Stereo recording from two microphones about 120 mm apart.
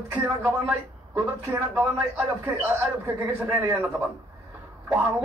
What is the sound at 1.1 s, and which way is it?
A man's voice, 20° right (ahead or behind).